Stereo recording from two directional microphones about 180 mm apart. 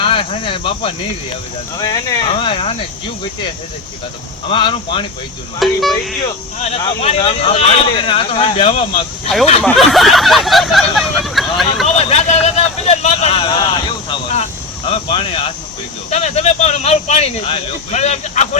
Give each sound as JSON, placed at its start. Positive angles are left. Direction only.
{"t": 0.0, "sound": "speech", "side_deg": 30}
{"t": 4.4, "sound": "speech", "side_deg": 30}
{"t": 5.5, "sound": "a sound", "side_deg": 0}
{"t": 6.6, "sound": "speech", "side_deg": 35}
{"t": 9.6, "sound": "a sound", "side_deg": 0}
{"t": 11.9, "sound": "vehicle", "side_deg": 35}
{"t": 14.8, "sound": "speech", "side_deg": 35}